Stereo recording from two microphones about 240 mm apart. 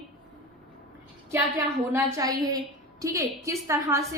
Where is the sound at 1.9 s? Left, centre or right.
Centre.